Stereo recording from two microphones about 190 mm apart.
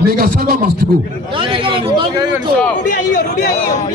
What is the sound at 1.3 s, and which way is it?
Speech, 25° right (ahead or behind).